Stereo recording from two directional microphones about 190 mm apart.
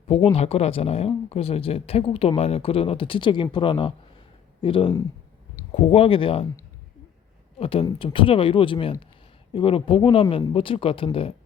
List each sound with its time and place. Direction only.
0.1 s speech: 30° left (ahead or behind)
7.6 s speech: 30° left (ahead or behind)